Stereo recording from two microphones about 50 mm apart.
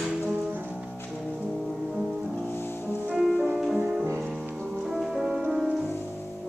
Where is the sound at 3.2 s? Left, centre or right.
Centre.